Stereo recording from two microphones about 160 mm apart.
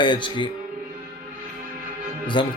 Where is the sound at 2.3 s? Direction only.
30° left (ahead or behind).